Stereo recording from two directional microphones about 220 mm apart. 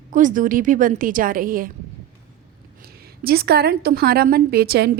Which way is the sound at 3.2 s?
45° right (ahead or behind).